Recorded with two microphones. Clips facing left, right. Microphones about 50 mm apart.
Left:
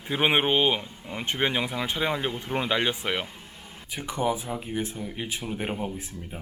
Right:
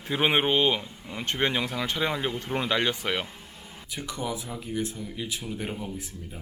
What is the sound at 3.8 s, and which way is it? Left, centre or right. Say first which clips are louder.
Speech: left 5 dB; left.